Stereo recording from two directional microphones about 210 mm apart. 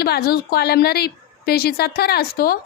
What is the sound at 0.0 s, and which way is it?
Speech, 45° left (ahead or behind).